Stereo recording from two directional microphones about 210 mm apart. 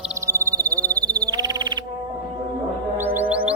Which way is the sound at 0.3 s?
15° right (ahead or behind).